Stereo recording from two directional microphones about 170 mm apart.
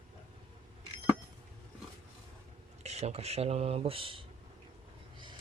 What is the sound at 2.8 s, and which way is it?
Speech, 40° right (ahead or behind).